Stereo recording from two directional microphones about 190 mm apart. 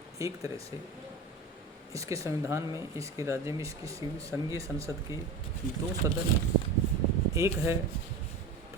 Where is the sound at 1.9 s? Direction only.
15° right (ahead or behind).